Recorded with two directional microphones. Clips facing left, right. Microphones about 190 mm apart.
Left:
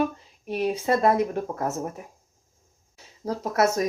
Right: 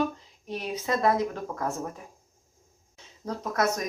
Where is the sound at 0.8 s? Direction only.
25° left (ahead or behind).